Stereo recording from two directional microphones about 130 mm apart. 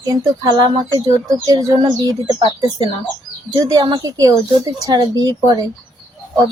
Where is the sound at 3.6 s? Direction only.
30° right (ahead or behind).